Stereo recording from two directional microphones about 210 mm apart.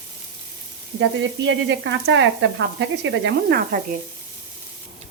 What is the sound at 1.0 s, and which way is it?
Frying, 60° right (ahead or behind).